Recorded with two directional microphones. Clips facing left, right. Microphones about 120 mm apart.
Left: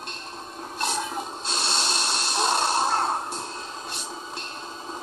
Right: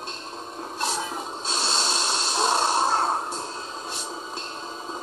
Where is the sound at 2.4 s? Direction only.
20° right (ahead or behind).